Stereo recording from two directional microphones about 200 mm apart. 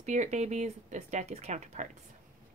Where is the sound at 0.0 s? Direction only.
35° right (ahead or behind).